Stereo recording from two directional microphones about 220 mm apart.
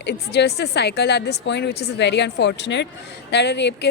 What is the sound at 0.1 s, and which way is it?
A woman's voice, 50° left (ahead or behind).